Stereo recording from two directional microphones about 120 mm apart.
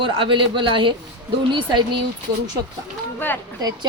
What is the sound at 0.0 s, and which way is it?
A man's voice, 45° right (ahead or behind).